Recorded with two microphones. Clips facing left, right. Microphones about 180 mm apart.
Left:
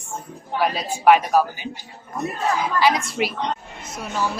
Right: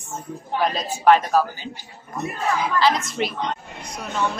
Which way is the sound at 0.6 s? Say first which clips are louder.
Left 1 dB; 10° left (ahead or behind).